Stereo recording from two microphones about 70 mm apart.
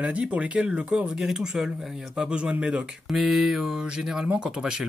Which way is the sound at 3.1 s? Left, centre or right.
Centre.